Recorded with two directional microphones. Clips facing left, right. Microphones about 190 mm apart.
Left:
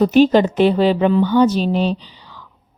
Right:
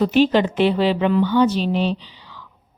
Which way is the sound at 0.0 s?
45° left (ahead or behind).